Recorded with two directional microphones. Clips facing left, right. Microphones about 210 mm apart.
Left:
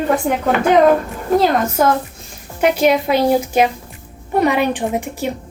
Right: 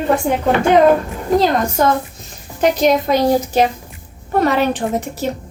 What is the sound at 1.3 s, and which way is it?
A woman's voice, 5° left (ahead or behind).